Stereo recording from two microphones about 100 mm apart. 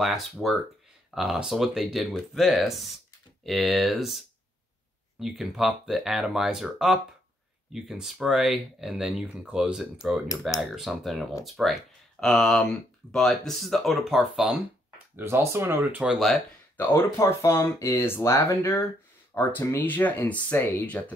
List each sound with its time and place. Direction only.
0.0 s speech: centre (ahead or behind)
5.2 s speech: centre (ahead or behind)
15.1 s speech: 25° right (ahead or behind)
16.0 s speech: 5° right (ahead or behind)
16.7 s speech: 20° left (ahead or behind)